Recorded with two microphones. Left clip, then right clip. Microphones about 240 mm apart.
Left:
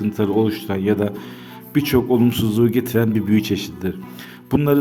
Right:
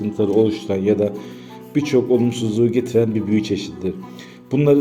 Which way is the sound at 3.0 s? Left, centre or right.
Left.